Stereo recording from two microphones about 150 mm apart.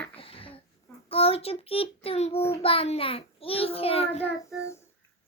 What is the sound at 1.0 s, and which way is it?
Child singing, 40° left (ahead or behind).